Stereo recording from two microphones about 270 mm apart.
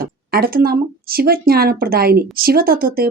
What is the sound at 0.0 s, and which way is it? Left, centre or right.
Speech, right.